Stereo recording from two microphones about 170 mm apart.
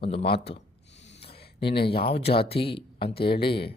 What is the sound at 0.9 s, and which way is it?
Snort, 90° left.